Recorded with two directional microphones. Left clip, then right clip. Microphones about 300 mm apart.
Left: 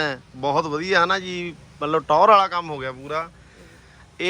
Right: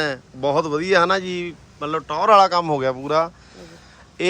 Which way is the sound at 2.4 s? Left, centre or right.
Centre.